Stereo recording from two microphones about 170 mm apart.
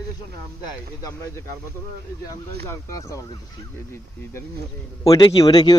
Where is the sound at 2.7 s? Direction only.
15° left (ahead or behind).